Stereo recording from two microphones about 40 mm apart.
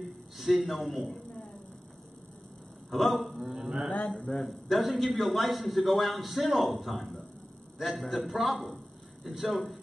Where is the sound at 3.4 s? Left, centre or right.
Centre.